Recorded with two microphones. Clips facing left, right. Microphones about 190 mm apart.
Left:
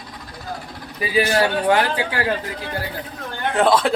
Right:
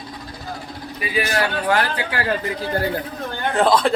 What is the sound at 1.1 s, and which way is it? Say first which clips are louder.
Speech: left 4 dB; 25° left (ahead or behind).